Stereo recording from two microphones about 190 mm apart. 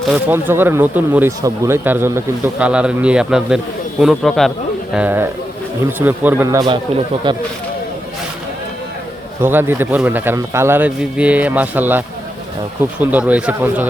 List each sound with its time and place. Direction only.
0.1 s a man's voice: 10° right (ahead or behind)
4.9 s a man's voice: 10° right (ahead or behind)
9.4 s a man's voice: 10° right (ahead or behind)